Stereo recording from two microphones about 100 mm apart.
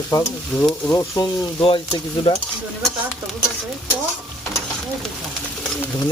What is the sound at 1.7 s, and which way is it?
Speech, 50° left (ahead or behind).